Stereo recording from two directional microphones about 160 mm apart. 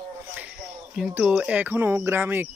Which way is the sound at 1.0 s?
10° right (ahead or behind).